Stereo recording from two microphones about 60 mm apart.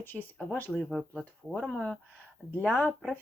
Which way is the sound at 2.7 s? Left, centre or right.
Left.